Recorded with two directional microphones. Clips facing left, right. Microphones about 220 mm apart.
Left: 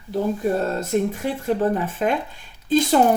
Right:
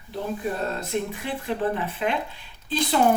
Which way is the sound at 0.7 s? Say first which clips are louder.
Left 6 dB; 45° left (ahead or behind).